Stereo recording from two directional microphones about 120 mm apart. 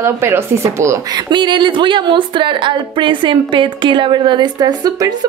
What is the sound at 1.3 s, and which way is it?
A woman's voice, 40° right (ahead or behind).